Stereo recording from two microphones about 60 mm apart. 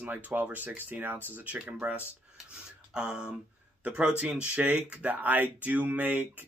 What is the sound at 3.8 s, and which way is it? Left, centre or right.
Speech, centre.